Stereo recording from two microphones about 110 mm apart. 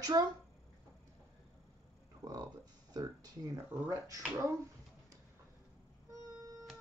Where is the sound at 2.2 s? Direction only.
30° right (ahead or behind).